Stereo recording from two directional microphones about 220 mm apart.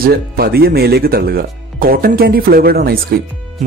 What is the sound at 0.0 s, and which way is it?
Speech, 45° right (ahead or behind).